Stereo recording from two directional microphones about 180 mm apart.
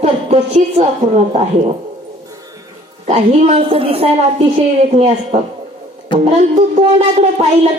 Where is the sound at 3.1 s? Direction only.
35° right (ahead or behind).